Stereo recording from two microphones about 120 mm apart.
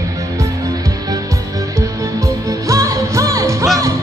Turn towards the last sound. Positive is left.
turn(degrees=-25)  # may be behind; listen again after turning